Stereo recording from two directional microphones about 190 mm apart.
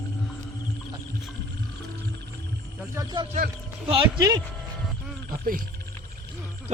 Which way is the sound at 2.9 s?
25° right (ahead or behind).